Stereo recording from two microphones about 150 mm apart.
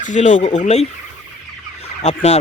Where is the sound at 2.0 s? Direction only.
45° left (ahead or behind).